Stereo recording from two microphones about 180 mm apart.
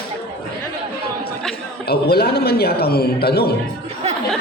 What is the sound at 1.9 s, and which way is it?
Speech, 60° left (ahead or behind).